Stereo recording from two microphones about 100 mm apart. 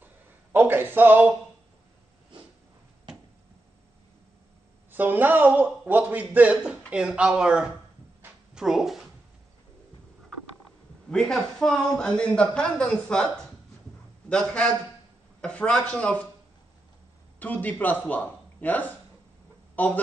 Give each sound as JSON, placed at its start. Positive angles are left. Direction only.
{"t": 0.0, "sound": "a sound", "side_deg": -20}
{"t": 4.9, "sound": "a man's voice", "side_deg": -20}
{"t": 11.1, "sound": "a man's voice", "side_deg": 5}
{"t": 17.4, "sound": "speech", "side_deg": 15}